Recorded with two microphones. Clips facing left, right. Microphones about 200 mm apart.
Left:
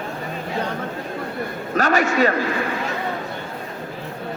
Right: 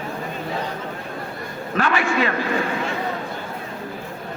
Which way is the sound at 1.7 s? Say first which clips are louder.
Left 2 dB; 40° left (ahead or behind).